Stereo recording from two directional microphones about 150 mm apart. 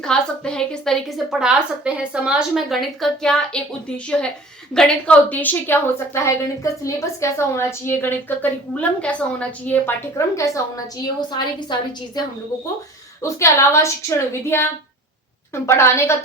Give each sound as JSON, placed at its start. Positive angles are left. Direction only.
{"t": 0.0, "sound": "a woman's voice", "side_deg": 5}
{"t": 13.2, "sound": "a woman's voice", "side_deg": 20}